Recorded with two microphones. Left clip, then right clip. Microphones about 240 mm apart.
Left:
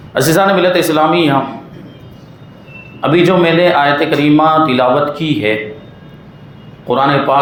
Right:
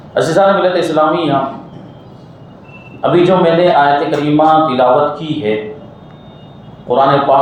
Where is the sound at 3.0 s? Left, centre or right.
Left.